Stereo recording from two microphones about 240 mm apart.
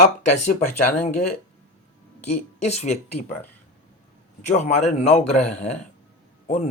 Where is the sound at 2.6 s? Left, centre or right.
Left.